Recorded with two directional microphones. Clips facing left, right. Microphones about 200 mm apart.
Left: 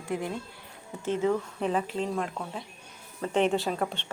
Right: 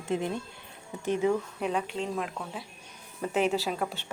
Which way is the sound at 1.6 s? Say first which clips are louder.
Left 2 dB; centre (ahead or behind).